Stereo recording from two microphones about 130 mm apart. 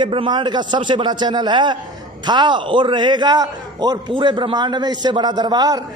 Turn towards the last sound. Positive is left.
turn(degrees=-30)  # may be behind; listen again after turning